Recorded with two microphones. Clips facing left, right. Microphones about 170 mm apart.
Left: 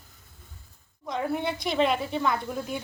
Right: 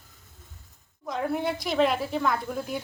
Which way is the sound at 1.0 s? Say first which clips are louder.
Right 1 dB; centre (ahead or behind).